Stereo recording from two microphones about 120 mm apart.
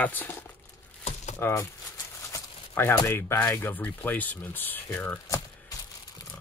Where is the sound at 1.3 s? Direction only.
20° left (ahead or behind).